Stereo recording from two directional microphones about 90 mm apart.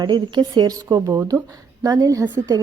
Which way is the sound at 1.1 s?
35° right (ahead or behind).